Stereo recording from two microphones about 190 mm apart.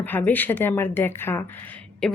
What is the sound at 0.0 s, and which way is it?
A woman's voice, 10° left (ahead or behind).